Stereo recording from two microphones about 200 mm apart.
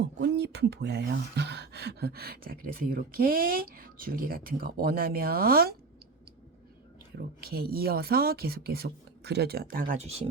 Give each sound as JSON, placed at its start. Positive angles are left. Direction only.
{"t": 0.0, "sound": "speech", "side_deg": -60}
{"t": 7.2, "sound": "speech", "side_deg": -50}